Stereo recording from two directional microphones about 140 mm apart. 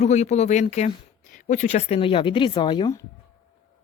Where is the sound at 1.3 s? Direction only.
65° left (ahead or behind); by 2.9 s 35° left (ahead or behind).